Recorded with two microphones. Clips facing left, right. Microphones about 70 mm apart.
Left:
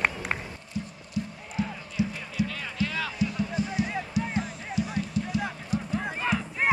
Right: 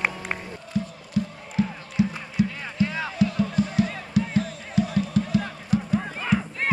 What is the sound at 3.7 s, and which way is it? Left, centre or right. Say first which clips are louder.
Music: right 5 dB; centre.